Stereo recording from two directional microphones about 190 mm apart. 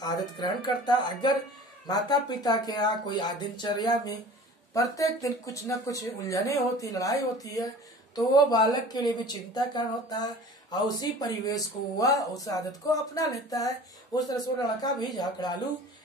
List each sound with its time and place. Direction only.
0.0 s speech: 20° left (ahead or behind)